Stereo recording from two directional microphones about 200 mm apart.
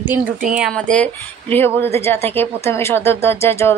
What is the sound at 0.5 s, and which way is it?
A woman's voice, centre (ahead or behind).